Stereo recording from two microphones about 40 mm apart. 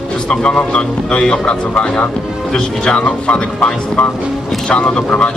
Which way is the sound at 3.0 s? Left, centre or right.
Left.